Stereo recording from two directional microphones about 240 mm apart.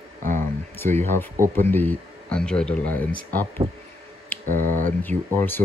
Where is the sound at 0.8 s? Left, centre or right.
Centre.